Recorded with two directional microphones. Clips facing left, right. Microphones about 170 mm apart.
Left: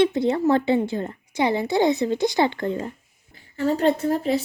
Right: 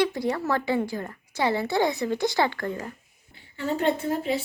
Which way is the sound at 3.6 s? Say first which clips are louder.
Left 5 dB; 40° left (ahead or behind).